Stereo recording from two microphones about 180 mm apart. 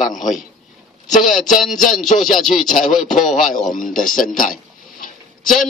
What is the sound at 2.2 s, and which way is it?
Speech, centre (ahead or behind).